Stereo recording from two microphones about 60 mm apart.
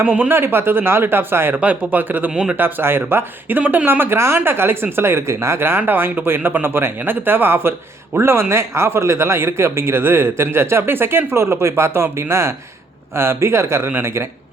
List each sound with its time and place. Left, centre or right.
0.3 s speech: right
1.5 s speech: right
2.3 s speech: centre
2.6 s speech: right